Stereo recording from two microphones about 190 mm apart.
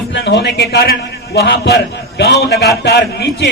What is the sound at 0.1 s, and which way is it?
A man's voice, 65° left (ahead or behind).